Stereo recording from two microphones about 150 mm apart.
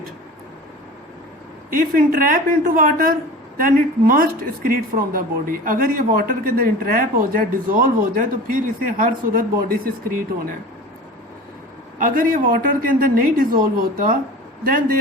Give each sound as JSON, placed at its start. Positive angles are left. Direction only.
{"t": 1.7, "sound": "a woman's voice", "side_deg": -70}
{"t": 11.9, "sound": "a woman's voice", "side_deg": -70}